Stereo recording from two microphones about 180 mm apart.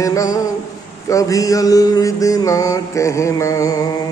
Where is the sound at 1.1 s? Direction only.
20° left (ahead or behind).